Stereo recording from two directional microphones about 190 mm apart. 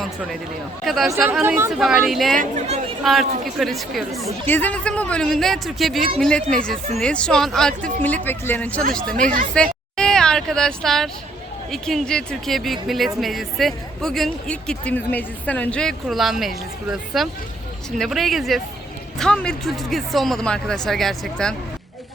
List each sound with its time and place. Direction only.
0.9 s speech: centre (ahead or behind)
1.1 s speech: 10° right (ahead or behind)
2.4 s speech: 40° right (ahead or behind)
3.0 s speech: centre (ahead or behind)
9.2 s speech: 45° right (ahead or behind)
10.0 s a sound: 5° left (ahead or behind)
11.7 s speech: centre (ahead or behind)